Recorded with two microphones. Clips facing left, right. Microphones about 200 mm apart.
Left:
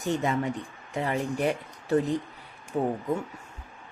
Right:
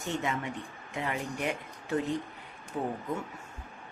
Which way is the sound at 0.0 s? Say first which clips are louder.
Left 6 dB; 35° left (ahead or behind).